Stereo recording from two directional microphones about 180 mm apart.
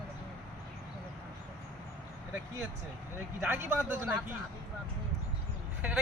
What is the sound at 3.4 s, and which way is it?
Speech, 10° right (ahead or behind).